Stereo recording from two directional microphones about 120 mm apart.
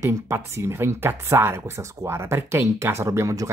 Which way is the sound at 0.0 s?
20° right (ahead or behind).